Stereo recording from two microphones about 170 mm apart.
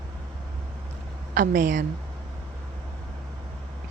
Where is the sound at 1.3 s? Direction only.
50° right (ahead or behind).